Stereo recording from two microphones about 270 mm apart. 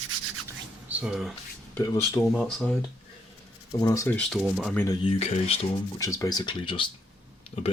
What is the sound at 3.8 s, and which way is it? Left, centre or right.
Speech, centre.